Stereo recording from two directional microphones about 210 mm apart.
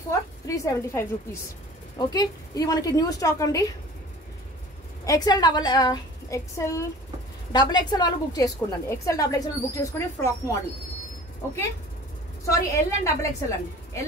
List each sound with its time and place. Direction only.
0.5 s a woman's voice: 15° left (ahead or behind)
5.0 s a woman's voice: 20° left (ahead or behind)
12.4 s a woman's voice: 15° left (ahead or behind)